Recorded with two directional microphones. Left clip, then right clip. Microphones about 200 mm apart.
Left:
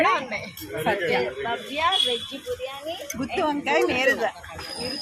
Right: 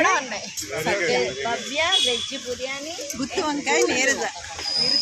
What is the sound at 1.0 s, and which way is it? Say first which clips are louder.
Speech: right 2 dB; 50° right (ahead or behind).